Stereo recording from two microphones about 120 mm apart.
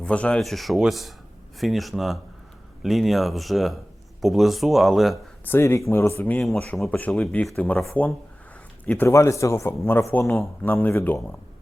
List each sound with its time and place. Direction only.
0.0 s speech: 10° left (ahead or behind)
5.5 s a man's voice: 20° left (ahead or behind)
6.4 s a man's voice: 5° left (ahead or behind)
8.9 s a man's voice: 20° left (ahead or behind)